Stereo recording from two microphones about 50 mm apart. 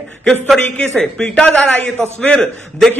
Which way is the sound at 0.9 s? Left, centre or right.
Centre.